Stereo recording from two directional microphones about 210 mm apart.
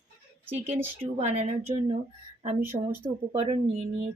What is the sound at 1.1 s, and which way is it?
Speech, 30° right (ahead or behind).